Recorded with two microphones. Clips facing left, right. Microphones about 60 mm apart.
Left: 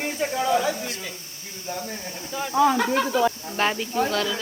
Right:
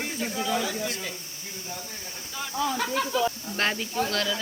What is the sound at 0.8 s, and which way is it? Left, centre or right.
Speech, centre.